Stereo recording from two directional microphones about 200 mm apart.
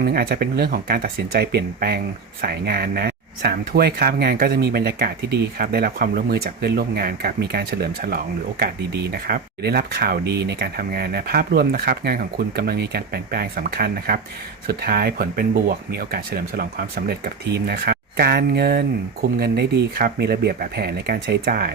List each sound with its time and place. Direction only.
0.0 s speech: 50° right (ahead or behind)